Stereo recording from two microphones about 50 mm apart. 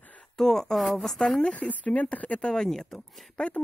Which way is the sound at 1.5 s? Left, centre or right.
Left.